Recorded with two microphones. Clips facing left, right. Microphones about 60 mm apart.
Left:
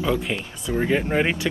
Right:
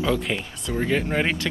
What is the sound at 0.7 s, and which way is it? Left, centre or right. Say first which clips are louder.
Speech: left 2 dB; centre.